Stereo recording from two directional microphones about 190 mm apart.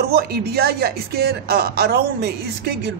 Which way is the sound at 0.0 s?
55° right (ahead or behind).